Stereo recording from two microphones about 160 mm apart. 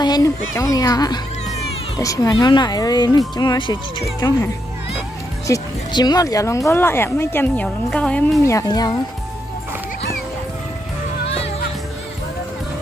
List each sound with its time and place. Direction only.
0.0 s speech: 25° left (ahead or behind)
5.5 s speech: 25° left (ahead or behind); by 8.4 s 5° left (ahead or behind)
8.5 s speech: 20° left (ahead or behind)